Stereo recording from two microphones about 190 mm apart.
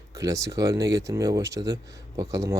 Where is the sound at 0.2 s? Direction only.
15° right (ahead or behind).